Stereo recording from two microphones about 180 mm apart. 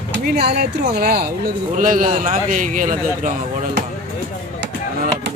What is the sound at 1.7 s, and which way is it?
A man's voice, 50° right (ahead or behind).